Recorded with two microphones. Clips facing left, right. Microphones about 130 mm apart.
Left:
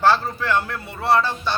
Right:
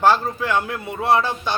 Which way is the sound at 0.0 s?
15° right (ahead or behind).